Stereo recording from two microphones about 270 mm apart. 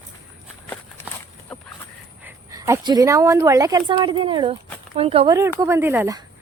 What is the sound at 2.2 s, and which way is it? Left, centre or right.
Speech, centre.